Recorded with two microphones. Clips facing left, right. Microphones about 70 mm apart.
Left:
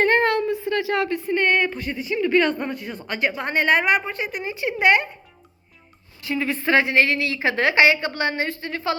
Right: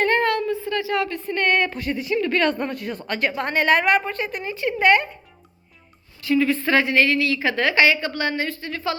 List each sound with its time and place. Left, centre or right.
0.0 s a sound: left
1.2 s a woman's voice: centre
6.2 s a woman's voice: left